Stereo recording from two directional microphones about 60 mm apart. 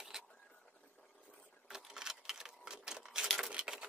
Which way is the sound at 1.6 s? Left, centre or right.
Centre.